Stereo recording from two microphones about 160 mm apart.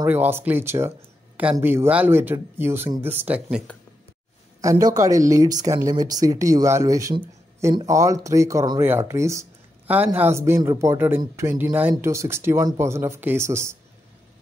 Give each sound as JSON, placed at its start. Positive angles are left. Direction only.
{"t": 0.0, "sound": "speech", "side_deg": -15}
{"t": 4.6, "sound": "speech", "side_deg": -20}